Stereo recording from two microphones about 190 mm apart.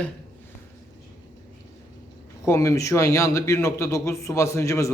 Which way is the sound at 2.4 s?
15° left (ahead or behind).